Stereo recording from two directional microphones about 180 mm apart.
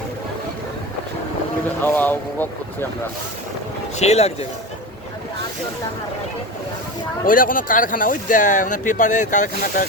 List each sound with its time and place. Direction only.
1.8 s speech: 10° left (ahead or behind)
3.9 s speech: 35° left (ahead or behind)
7.3 s speech: 50° left (ahead or behind)